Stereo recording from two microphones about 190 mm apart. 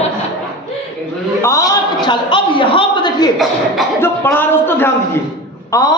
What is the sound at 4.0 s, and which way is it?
A man's voice, 10° left (ahead or behind).